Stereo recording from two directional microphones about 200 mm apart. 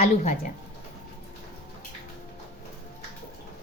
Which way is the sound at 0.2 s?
40° left (ahead or behind).